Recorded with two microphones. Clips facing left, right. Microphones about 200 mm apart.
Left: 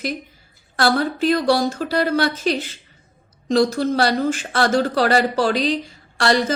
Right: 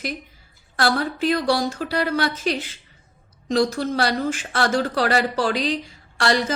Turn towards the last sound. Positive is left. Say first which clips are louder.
# left 3 dB
turn(degrees=35)  # may be behind; listen again after turning